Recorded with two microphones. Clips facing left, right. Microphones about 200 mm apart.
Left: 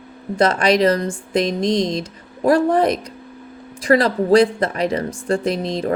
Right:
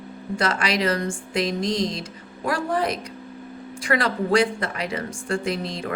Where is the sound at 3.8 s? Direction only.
35° left (ahead or behind).